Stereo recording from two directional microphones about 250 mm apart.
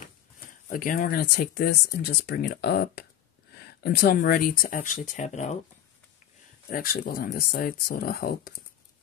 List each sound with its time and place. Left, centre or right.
0.7 s speech: left
6.7 s speech: left